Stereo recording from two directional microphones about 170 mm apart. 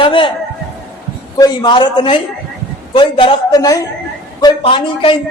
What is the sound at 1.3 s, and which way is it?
A man's voice, 25° left (ahead or behind).